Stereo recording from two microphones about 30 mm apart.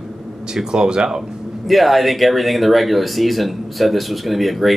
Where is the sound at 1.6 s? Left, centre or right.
Centre.